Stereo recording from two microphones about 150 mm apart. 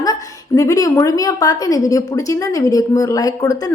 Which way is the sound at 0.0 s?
25° left (ahead or behind).